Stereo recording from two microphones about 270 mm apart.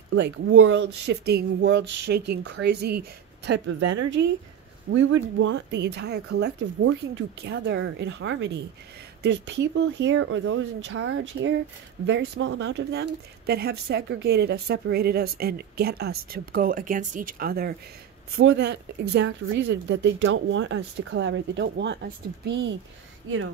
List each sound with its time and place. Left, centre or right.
0.1 s speech: right